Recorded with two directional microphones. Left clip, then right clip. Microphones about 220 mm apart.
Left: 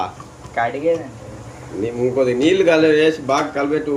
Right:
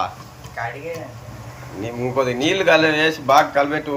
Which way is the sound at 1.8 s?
5° left (ahead or behind).